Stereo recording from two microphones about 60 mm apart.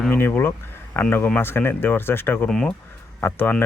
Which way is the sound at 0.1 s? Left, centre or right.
Left.